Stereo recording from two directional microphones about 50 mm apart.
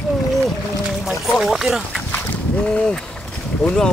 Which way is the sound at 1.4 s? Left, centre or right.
Centre.